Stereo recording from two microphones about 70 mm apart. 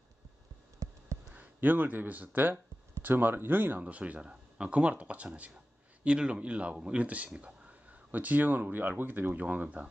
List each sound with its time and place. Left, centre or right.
1.3 s speech: right